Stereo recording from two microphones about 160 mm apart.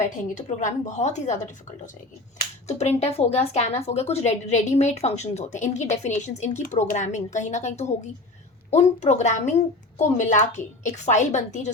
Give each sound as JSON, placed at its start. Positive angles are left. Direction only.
{"t": 0.3, "sound": "a woman's voice", "side_deg": 50}
{"t": 2.6, "sound": "a woman's voice", "side_deg": 45}